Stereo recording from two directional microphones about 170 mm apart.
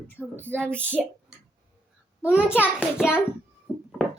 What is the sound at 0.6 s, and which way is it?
Speech, 10° right (ahead or behind).